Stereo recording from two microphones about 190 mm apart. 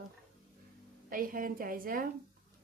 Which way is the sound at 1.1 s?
45° right (ahead or behind).